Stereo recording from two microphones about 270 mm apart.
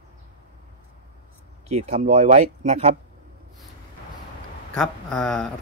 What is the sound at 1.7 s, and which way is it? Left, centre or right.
Speech, right.